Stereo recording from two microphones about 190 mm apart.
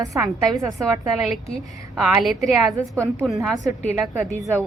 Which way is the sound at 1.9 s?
Centre (ahead or behind).